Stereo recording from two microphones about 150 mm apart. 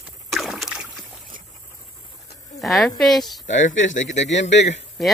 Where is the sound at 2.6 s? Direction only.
Centre (ahead or behind).